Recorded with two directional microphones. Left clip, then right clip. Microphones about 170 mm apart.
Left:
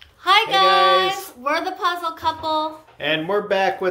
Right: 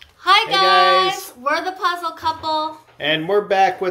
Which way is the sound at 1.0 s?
5° left (ahead or behind).